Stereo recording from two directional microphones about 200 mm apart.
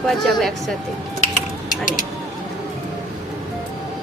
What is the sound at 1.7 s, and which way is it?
Speech, 40° left (ahead or behind).